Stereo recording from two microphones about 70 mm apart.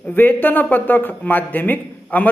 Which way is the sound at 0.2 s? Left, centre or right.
Left.